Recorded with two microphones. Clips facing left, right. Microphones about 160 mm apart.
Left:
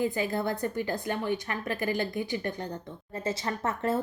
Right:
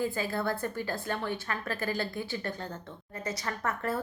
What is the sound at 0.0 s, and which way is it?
A woman's voice, 20° left (ahead or behind).